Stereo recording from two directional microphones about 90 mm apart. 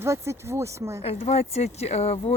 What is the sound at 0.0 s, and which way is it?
Speech, 30° right (ahead or behind).